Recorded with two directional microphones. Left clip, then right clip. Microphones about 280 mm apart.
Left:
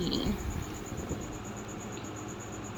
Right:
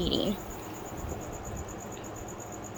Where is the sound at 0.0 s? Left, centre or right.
Right.